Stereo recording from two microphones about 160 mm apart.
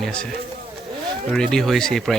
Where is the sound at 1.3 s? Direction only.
5° left (ahead or behind).